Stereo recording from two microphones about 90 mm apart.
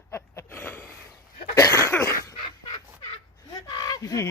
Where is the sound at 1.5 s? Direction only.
30° left (ahead or behind).